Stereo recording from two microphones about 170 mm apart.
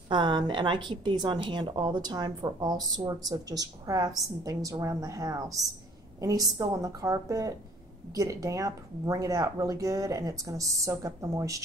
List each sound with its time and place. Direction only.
0.1 s a woman's voice: 25° right (ahead or behind)